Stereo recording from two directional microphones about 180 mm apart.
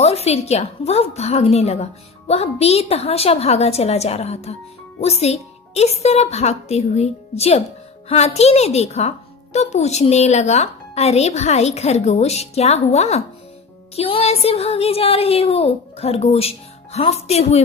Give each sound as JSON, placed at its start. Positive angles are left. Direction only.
{"t": 0.0, "sound": "a woman's voice", "side_deg": 35}